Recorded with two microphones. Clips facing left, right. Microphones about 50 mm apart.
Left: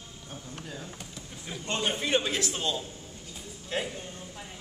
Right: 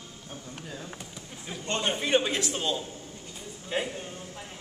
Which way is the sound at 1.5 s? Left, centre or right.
Centre.